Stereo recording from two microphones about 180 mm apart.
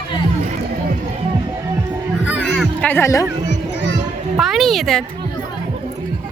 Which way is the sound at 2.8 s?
15° left (ahead or behind).